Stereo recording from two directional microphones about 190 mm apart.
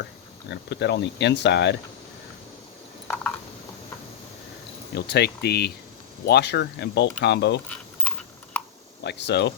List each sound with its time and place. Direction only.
0.0 s speech: 65° left (ahead or behind)
4.9 s speech: 60° left (ahead or behind)
9.0 s speech: 65° left (ahead or behind)